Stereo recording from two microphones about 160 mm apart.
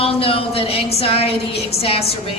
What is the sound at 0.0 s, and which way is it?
A woman's voice, 35° left (ahead or behind).